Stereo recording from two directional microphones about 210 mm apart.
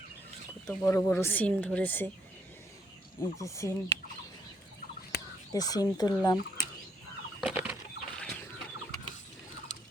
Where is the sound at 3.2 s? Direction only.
15° left (ahead or behind).